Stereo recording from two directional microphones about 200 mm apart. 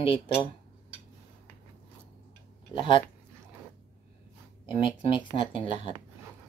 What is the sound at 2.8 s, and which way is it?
Speech, 25° left (ahead or behind).